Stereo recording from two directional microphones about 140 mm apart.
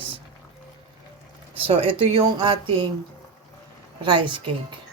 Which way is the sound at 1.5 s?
40° right (ahead or behind).